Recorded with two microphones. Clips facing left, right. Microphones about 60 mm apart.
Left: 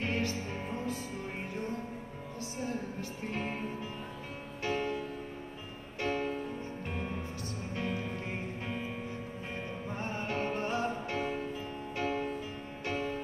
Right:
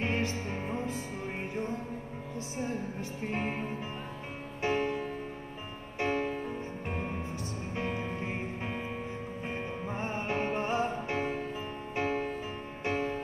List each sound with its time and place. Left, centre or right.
0.0 s music: right
2.5 s music: right
4.6 s music: right
5.9 s music: right